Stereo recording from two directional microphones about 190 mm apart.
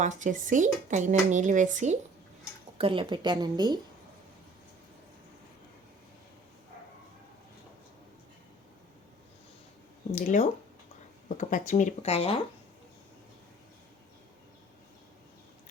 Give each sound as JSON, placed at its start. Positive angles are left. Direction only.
{"t": 0.0, "sound": "speech", "side_deg": -40}
{"t": 2.7, "sound": "a woman's voice", "side_deg": -25}
{"t": 10.2, "sound": "speech", "side_deg": 40}